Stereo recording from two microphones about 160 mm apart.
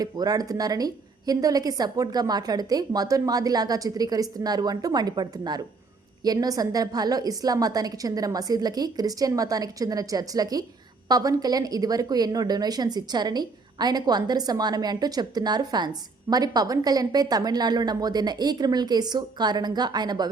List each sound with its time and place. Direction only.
0.0 s a woman's voice: 25° right (ahead or behind)